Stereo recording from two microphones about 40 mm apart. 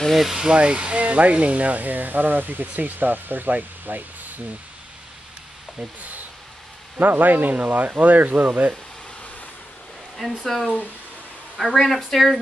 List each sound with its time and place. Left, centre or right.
0.1 s speech: centre
0.4 s speech: right
5.8 s speech: right
10.4 s speech: centre